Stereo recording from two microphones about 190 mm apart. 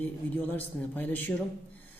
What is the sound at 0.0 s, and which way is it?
A woman's voice, 10° left (ahead or behind).